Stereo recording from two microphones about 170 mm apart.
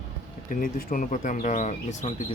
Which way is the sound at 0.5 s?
55° left (ahead or behind).